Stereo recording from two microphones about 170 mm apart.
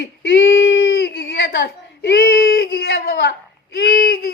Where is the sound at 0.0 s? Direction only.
70° left (ahead or behind).